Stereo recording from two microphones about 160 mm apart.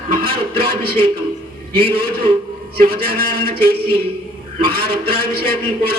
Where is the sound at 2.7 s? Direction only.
70° right (ahead or behind).